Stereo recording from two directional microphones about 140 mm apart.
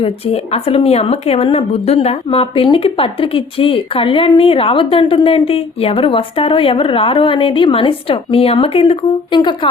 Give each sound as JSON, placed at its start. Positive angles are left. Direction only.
{"t": 0.0, "sound": "a woman's voice", "side_deg": 45}